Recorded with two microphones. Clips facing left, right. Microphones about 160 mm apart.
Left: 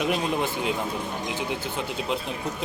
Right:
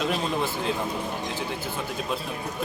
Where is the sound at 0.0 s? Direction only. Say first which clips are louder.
Left 1 dB; 15° left (ahead or behind).